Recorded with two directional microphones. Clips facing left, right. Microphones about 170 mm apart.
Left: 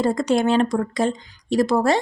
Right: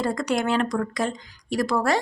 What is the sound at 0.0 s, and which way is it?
Speech, 25° left (ahead or behind).